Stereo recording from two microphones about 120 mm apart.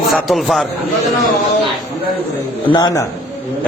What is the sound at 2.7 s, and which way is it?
Speech, 35° left (ahead or behind).